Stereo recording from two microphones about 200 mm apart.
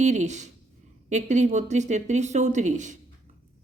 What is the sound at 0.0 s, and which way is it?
Speech, 35° right (ahead or behind).